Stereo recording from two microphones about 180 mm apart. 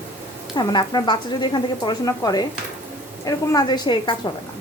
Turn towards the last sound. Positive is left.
turn(degrees=25)  # may be behind; listen again after turning